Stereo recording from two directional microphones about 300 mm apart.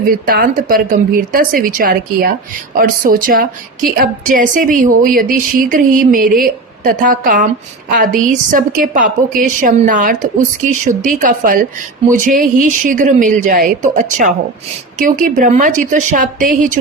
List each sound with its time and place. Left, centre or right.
0.0 s a woman's voice: right